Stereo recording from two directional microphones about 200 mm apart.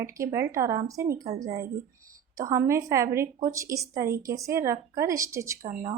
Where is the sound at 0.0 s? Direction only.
15° right (ahead or behind).